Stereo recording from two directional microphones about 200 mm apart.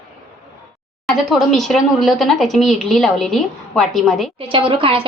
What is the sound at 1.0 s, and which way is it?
A woman's voice, centre (ahead or behind).